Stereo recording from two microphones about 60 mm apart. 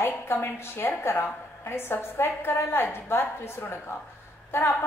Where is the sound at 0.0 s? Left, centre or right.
Left.